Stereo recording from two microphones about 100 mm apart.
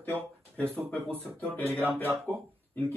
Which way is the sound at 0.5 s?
20° right (ahead or behind).